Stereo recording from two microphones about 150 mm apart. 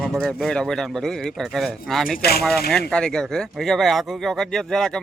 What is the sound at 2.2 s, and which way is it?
Speech, 90° left.